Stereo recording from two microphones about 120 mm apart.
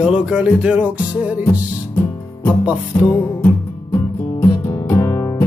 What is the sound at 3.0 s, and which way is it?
Music, 25° left (ahead or behind).